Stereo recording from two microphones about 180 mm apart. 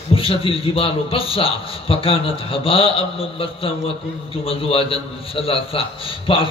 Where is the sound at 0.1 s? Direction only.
30° left (ahead or behind).